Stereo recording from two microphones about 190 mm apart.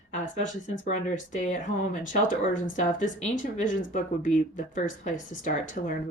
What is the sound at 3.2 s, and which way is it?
A woman's voice, 45° left (ahead or behind).